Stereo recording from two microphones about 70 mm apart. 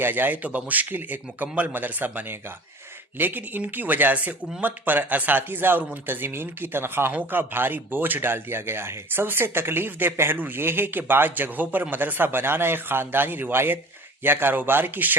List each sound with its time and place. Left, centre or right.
0.0 s speech: right